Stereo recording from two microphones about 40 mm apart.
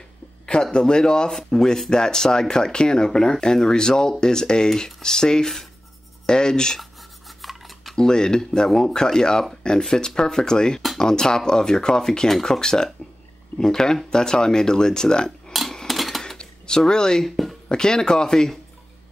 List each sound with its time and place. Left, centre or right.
0.5 s speech: centre
6.8 s filing: centre
7.9 s speech: centre
15.5 s a sound: centre
16.3 s a sound: centre
17.6 s speech: centre